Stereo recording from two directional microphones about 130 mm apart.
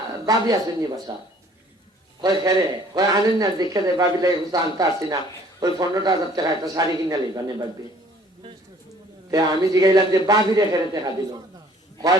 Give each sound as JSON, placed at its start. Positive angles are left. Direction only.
{"t": 0.3, "sound": "a man's voice", "side_deg": -30}
{"t": 2.2, "sound": "a man's voice", "side_deg": -30}
{"t": 9.3, "sound": "a man's voice", "side_deg": -25}